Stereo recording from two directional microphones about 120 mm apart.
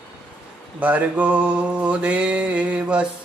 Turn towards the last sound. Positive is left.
turn(degrees=-10)  # may be behind; listen again after turning